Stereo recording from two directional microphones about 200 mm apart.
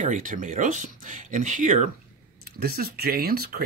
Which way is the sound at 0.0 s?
40° right (ahead or behind).